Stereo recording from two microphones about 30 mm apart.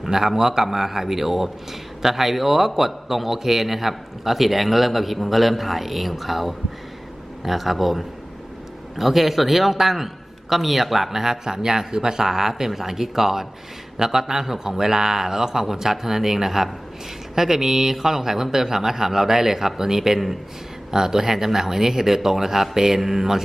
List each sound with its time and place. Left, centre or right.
0.0 s a man's voice: centre